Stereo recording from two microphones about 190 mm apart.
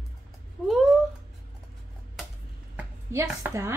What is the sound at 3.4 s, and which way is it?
Speech, 15° right (ahead or behind).